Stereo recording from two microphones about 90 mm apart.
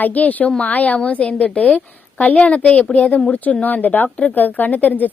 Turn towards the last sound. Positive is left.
turn(degrees=20)  # may be behind; listen again after turning